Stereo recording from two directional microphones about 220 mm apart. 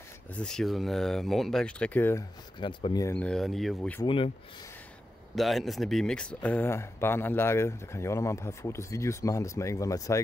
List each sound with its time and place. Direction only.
0.4 s speech: centre (ahead or behind)
2.6 s speech: 20° left (ahead or behind); by 4.0 s 5° left (ahead or behind)
4.0 s speech: 25° left (ahead or behind)
5.3 s speech: centre (ahead or behind)